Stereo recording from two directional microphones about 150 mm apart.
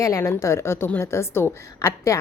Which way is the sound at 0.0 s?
20° left (ahead or behind).